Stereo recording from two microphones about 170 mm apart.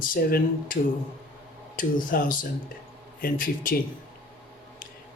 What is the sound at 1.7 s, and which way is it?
Speech, 55° left (ahead or behind).